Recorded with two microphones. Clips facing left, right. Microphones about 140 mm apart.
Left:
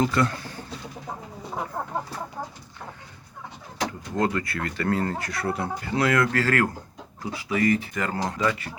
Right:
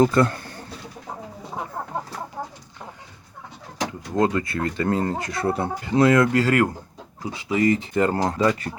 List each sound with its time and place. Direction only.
0.0 s speech: 40° right (ahead or behind)
4.1 s speech: 20° right (ahead or behind)
8.1 s speech: 40° right (ahead or behind)